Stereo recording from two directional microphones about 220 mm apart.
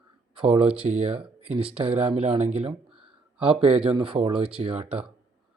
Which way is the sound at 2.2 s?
25° right (ahead or behind).